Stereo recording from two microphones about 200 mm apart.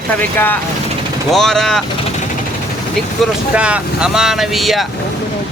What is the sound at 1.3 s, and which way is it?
Speech, centre (ahead or behind).